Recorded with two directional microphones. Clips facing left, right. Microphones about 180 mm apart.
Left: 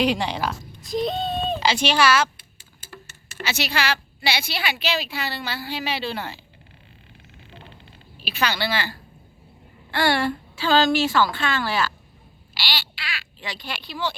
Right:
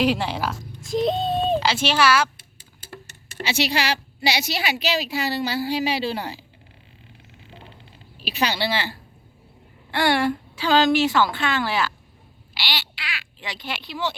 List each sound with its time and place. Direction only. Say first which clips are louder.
0.0 s speech: right 1 dB; 5° right (ahead or behind)
2.9 s a woman's voice: right 3 dB; 30° right (ahead or behind)
8.2 s a woman's voice: right 1 dB; 35° right (ahead or behind); by 14.2 s 20° right (ahead or behind)